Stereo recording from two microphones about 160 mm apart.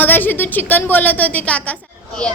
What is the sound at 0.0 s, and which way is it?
Speech, 10° left (ahead or behind).